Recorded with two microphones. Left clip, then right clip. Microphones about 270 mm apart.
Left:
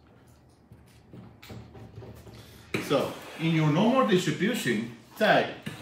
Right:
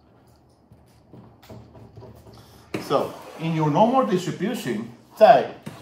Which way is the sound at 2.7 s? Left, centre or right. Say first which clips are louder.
Right 4 dB; centre.